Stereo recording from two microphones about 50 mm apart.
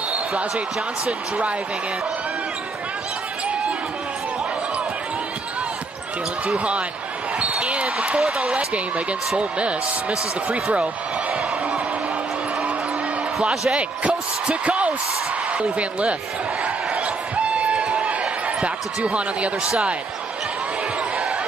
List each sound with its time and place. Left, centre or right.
6.4 s speech: right
13.4 s speech: centre
13.7 s speech: right
16.6 s a sound: right